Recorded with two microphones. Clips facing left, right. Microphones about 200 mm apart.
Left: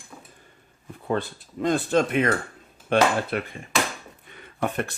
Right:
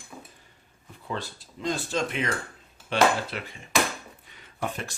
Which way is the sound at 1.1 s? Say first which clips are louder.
Left 8 dB; 55° left (ahead or behind).